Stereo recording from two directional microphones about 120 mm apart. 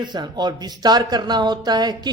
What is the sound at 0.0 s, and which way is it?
Speech, 35° right (ahead or behind).